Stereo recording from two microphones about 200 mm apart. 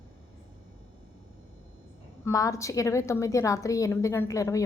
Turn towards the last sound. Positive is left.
turn(degrees=15)  # may be behind; listen again after turning